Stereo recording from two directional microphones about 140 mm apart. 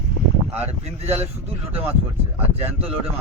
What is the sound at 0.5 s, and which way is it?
Speech, 50° right (ahead or behind).